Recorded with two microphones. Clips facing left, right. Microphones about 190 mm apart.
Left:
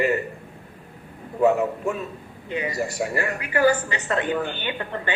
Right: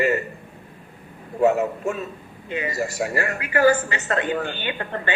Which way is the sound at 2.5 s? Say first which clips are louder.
Even; 50° right (ahead or behind).